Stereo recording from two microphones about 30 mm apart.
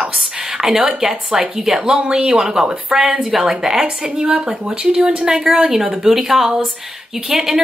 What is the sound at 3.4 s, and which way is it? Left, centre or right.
Speech, centre.